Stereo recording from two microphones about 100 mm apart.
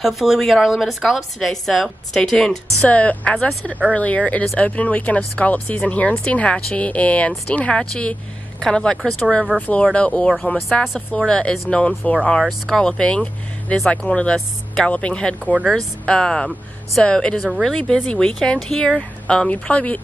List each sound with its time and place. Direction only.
0.0 s speech: centre (ahead or behind); by 20.0 s 15° left (ahead or behind)